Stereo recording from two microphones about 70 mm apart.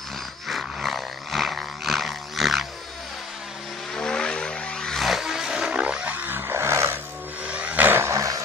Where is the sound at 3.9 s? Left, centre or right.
Centre.